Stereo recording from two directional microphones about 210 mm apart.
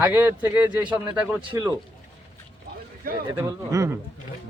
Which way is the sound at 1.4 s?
15° right (ahead or behind).